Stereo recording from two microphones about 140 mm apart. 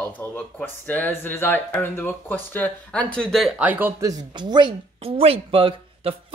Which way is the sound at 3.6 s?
15° right (ahead or behind).